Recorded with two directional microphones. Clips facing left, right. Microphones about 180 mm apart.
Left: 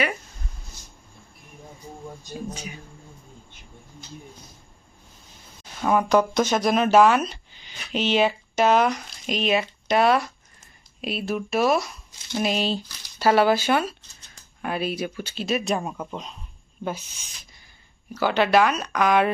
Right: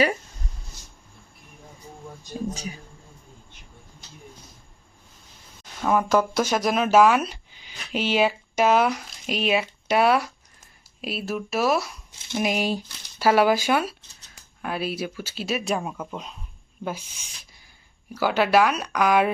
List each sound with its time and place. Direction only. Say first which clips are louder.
2.5 s speech: right 2 dB; 35° right (ahead or behind)
5.8 s speech: left 1 dB; centre (ahead or behind)